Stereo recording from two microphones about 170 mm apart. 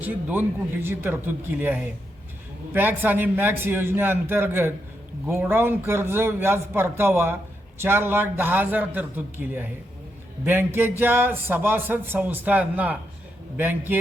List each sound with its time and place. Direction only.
0.0 s a man's voice: 10° right (ahead or behind)